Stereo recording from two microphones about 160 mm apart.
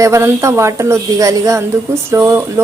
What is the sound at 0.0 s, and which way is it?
Speech, 20° right (ahead or behind).